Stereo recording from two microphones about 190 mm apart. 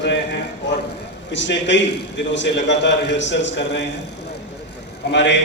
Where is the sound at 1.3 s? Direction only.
70° left (ahead or behind).